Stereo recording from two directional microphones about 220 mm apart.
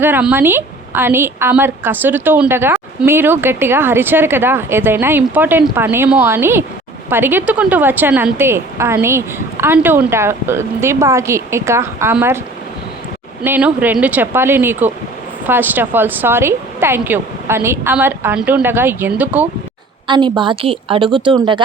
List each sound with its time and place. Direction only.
0.0 s a woman's voice: 10° right (ahead or behind)
13.4 s a woman's voice: 5° right (ahead or behind)
20.1 s a woman's voice: 20° right (ahead or behind)